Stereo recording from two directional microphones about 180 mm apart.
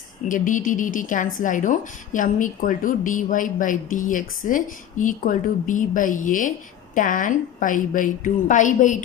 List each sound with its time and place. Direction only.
0.3 s a woman's voice: 45° left (ahead or behind)